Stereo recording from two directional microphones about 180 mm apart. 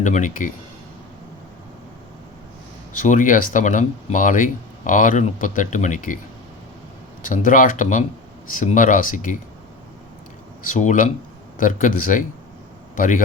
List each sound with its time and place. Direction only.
0.0 s speech: 45° left (ahead or behind)
3.0 s speech: 45° left (ahead or behind)
7.3 s speech: 45° left (ahead or behind)
10.7 s speech: 45° left (ahead or behind)